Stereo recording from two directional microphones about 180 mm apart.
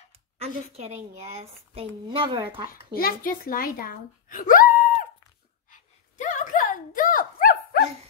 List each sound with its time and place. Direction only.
0.4 s a woman's voice: 35° right (ahead or behind)
2.7 s a child's voice: 50° left (ahead or behind)
5.7 s a sound: 45° left (ahead or behind)